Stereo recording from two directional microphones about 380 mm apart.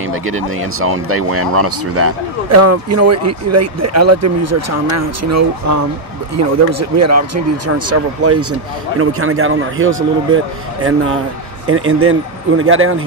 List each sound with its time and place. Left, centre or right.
0.0 s speech: right